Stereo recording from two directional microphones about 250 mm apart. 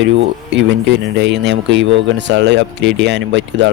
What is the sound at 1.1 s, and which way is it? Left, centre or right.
Speech, right.